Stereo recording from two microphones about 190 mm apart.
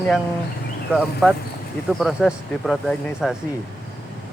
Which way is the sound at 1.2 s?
5° right (ahead or behind).